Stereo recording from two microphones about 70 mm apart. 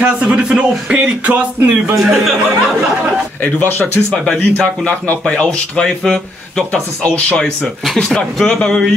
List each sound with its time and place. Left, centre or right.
0.0 s speech: centre
2.0 s speech: centre
3.4 s speech: left; by 8.9 s centre